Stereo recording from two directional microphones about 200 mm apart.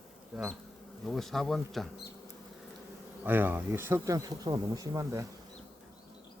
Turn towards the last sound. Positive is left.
turn(degrees=-15)  # may be behind; listen again after turning